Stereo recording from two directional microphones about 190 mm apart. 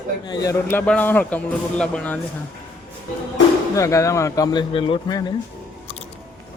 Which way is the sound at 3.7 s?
15° left (ahead or behind).